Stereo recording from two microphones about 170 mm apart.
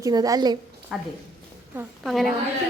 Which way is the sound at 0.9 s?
5° right (ahead or behind).